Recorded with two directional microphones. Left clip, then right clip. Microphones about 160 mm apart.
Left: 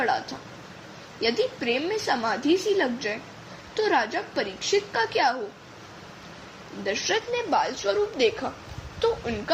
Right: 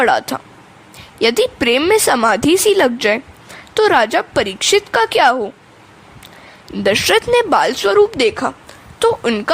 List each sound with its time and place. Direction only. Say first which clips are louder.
0.0 s a woman's voice: right 12 dB; 75° right (ahead or behind)
6.8 s a woman's voice: right 13 dB; 70° right (ahead or behind)